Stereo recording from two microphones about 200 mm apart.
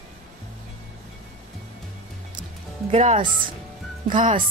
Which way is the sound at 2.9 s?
35° right (ahead or behind).